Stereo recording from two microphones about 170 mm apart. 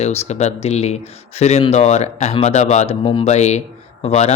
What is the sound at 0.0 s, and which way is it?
Speech, 40° left (ahead or behind).